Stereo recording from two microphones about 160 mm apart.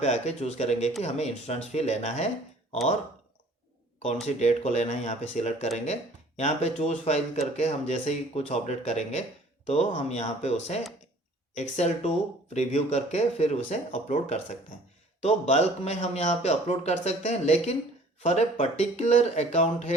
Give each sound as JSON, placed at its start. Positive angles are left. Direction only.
{"t": 0.0, "sound": "speech", "side_deg": 45}
{"t": 4.3, "sound": "speech", "side_deg": 45}